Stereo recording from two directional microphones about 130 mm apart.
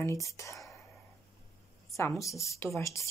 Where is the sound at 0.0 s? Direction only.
25° left (ahead or behind).